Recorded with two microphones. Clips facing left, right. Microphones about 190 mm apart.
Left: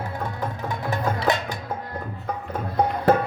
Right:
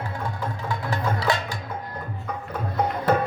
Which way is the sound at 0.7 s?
20° left (ahead or behind).